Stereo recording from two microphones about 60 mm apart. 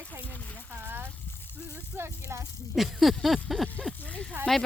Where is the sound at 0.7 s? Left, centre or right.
Right.